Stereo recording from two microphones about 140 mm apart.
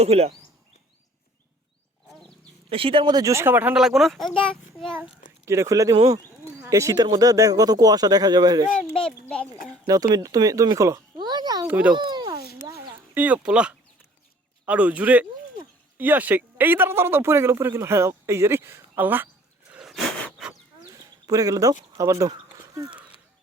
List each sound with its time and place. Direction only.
0.0 s speech: 50° right (ahead or behind)
2.0 s wild animals: 5° left (ahead or behind)
2.6 s speech: 40° right (ahead or behind); by 3.8 s 15° right (ahead or behind)
3.8 s speech: centre (ahead or behind)
5.5 s speech: 20° right (ahead or behind)
9.2 s speech: 10° left (ahead or behind)
9.8 s speech: 25° right (ahead or behind)
11.6 s speech: 10° right (ahead or behind)
11.9 s a sound: 30° right (ahead or behind)
12.6 s a sound: 15° right (ahead or behind)
14.6 s speech: 10° right (ahead or behind)
19.7 s a sound: 5° right (ahead or behind)
21.2 s speech: 25° right (ahead or behind)